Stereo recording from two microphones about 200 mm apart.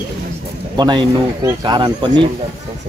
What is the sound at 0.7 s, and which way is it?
Speech, 20° right (ahead or behind).